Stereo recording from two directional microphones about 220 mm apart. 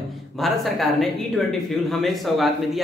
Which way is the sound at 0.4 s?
Centre (ahead or behind).